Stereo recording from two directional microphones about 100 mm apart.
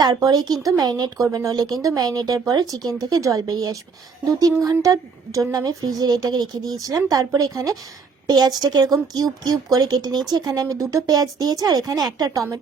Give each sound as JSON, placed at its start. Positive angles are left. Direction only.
{"t": 0.0, "sound": "speech", "side_deg": -40}